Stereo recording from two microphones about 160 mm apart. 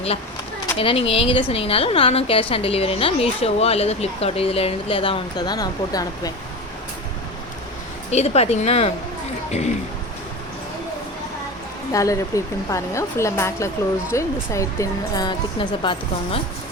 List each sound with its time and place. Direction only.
0.8 s a woman's voice: 35° left (ahead or behind)
8.1 s a woman's voice: 40° left (ahead or behind)
11.9 s speech: 20° left (ahead or behind)